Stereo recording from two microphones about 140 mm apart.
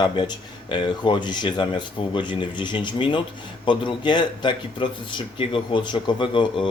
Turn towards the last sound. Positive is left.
turn(degrees=35)  # may be behind; listen again after turning